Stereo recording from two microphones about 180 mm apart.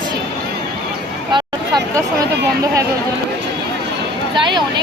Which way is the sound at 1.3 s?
20° right (ahead or behind).